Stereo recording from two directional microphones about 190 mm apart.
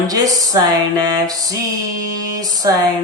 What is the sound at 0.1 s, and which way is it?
Speech, 20° right (ahead or behind).